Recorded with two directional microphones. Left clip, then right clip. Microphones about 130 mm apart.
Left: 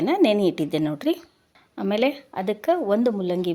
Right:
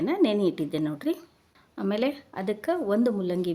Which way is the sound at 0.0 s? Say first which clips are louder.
Left 5 dB; 15° left (ahead or behind).